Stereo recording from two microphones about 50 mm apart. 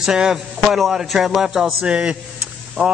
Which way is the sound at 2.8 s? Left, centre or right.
Right.